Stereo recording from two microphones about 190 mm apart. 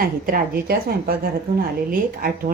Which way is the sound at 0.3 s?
50° right (ahead or behind).